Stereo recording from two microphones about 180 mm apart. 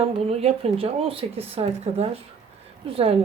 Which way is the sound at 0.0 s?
35° right (ahead or behind).